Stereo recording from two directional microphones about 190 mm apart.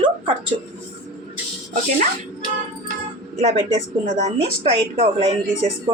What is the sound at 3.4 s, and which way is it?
Speech, 35° right (ahead or behind).